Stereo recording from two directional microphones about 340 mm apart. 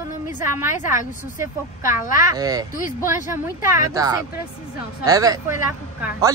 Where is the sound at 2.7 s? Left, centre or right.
Left.